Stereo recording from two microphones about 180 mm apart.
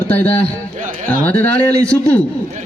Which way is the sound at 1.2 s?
10° left (ahead or behind).